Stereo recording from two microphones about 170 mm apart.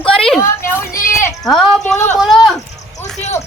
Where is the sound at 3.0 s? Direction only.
10° left (ahead or behind).